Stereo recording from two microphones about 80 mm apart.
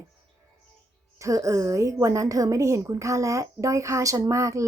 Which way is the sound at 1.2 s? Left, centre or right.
Right.